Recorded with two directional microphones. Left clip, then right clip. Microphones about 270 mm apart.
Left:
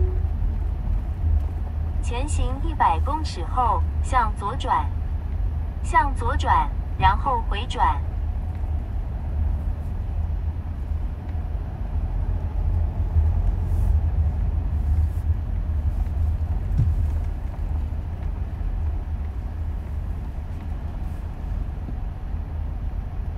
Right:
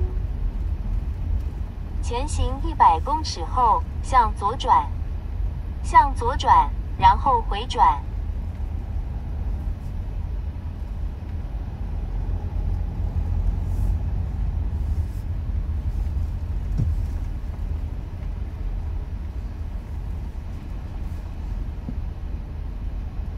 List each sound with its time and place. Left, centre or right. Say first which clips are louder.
2.1 s speech: right 3 dB; right
5.9 s speech: right 4 dB; right